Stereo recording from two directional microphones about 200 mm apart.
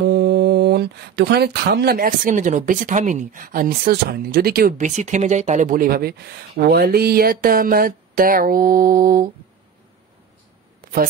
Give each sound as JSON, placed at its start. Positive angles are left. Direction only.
{"t": 0.0, "sound": "speech", "side_deg": -50}